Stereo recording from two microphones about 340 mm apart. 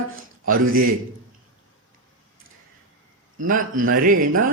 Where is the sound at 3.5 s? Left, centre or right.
Right.